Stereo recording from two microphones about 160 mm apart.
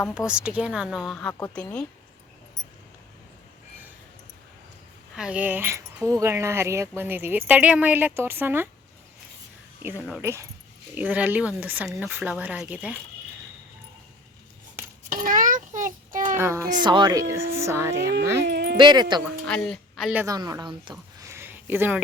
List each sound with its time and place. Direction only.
0.3 s speech: 5° right (ahead or behind); by 1.8 s 10° left (ahead or behind)
5.1 s speech: 5° right (ahead or behind)
9.8 s speech: 15° right (ahead or behind)
15.1 s a sound: 55° right (ahead or behind)
16.4 s speech: 20° right (ahead or behind)
16.8 s speech: 30° right (ahead or behind)
18.4 s a sound: 90° right
18.8 s speech: 30° right (ahead or behind)
19.5 s speech: 5° left (ahead or behind)
20.2 s speech: 20° right (ahead or behind)
21.2 s a sound: 15° right (ahead or behind)